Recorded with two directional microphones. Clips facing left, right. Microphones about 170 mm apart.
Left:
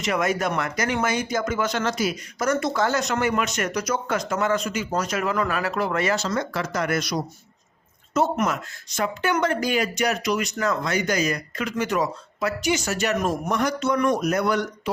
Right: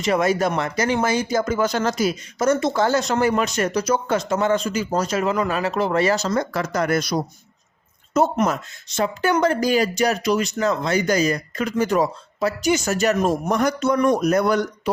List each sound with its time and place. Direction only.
0.0 s speech: 30° right (ahead or behind)
2.4 s speech: 25° right (ahead or behind)
8.4 s speech: 30° right (ahead or behind)
12.7 s speech: 45° right (ahead or behind)